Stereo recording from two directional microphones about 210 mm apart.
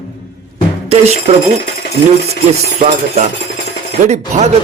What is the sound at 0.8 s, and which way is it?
Speech, 30° right (ahead or behind).